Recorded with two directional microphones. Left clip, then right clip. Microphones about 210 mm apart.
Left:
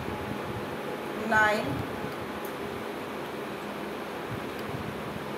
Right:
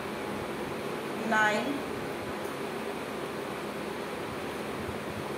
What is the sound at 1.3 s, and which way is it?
Speech, centre (ahead or behind).